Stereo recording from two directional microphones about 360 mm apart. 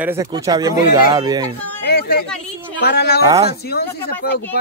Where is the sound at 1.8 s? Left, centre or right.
Left.